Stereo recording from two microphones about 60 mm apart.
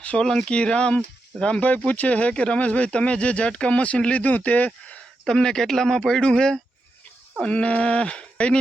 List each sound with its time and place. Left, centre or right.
0.2 s speech: centre
5.3 s speech: centre